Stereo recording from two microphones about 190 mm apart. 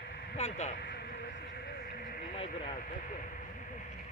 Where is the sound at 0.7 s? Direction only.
55° left (ahead or behind).